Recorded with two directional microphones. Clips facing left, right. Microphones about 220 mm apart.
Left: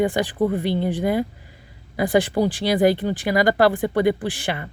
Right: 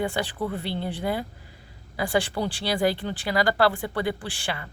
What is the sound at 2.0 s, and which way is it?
Speech, 15° left (ahead or behind).